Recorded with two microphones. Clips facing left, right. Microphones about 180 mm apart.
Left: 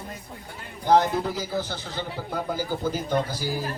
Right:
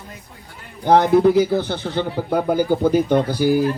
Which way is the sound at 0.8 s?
60° right (ahead or behind).